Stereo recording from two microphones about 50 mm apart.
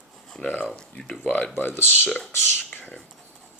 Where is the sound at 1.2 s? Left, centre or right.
Left.